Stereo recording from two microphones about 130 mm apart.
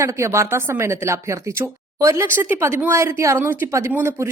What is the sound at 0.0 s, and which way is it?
Speech, 20° right (ahead or behind).